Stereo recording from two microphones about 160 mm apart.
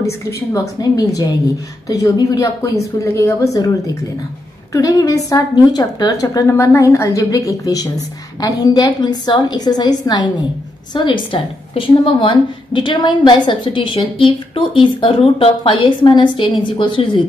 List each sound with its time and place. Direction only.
0.5 s a woman's voice: 20° left (ahead or behind)